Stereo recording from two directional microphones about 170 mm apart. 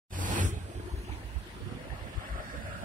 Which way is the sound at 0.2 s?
50° right (ahead or behind).